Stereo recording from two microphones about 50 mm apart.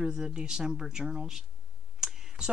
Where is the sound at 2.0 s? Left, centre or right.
Centre.